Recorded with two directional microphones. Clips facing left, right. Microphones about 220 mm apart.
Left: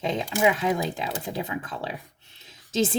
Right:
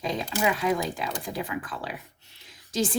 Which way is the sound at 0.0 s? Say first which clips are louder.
Left 4 dB; 20° left (ahead or behind).